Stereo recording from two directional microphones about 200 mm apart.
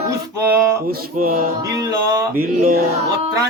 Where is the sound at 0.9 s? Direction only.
45° right (ahead or behind).